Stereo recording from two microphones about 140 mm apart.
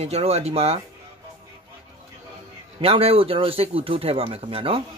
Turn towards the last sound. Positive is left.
turn(degrees=-40)  # may be behind; listen again after turning